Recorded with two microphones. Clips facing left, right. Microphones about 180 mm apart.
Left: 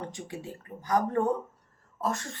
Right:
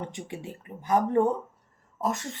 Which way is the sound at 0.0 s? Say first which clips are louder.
Right 2 dB; 20° right (ahead or behind).